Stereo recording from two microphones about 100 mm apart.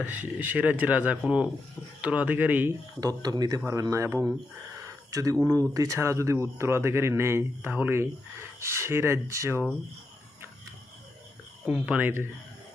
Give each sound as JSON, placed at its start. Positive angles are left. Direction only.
{"t": 0.0, "sound": "speech", "side_deg": -15}
{"t": 3.0, "sound": "speech", "side_deg": -40}
{"t": 11.7, "sound": "speech", "side_deg": -15}